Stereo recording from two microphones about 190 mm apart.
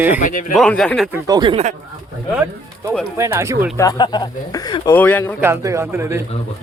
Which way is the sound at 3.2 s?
15° right (ahead or behind).